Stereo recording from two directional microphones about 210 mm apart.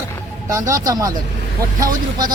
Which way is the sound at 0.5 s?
15° right (ahead or behind).